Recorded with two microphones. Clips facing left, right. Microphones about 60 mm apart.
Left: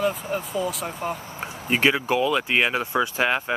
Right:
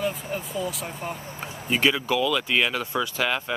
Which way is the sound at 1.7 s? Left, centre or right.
Left.